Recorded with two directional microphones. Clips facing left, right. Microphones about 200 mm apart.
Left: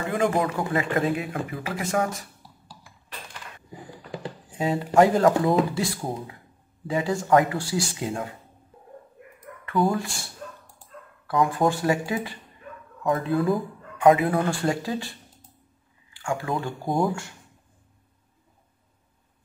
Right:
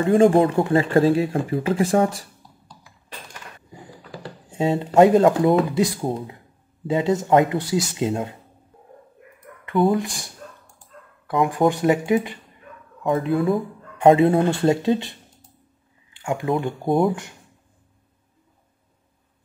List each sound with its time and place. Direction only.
0.0 s speech: 30° right (ahead or behind)
2.4 s a sound: 5° left (ahead or behind)
4.5 s speech: 25° right (ahead or behind)
9.8 s speech: 20° right (ahead or behind)